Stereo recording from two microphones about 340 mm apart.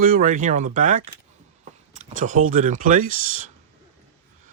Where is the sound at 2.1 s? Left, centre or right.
Right.